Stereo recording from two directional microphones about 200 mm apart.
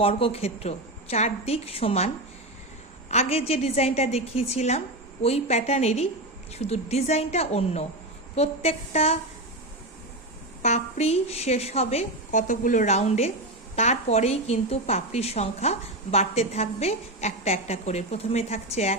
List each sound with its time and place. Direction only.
0.0 s a woman's voice: 30° left (ahead or behind)
3.1 s a woman's voice: 30° left (ahead or behind)
10.6 s a woman's voice: 35° left (ahead or behind)